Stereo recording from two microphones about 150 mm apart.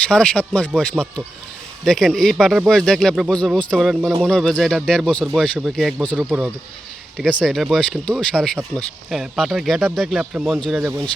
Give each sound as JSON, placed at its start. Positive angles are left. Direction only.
{"t": 0.1, "sound": "speech", "side_deg": 5}
{"t": 6.1, "sound": "speech", "side_deg": -5}
{"t": 7.2, "sound": "speech", "side_deg": 5}
{"t": 10.8, "sound": "speech", "side_deg": -15}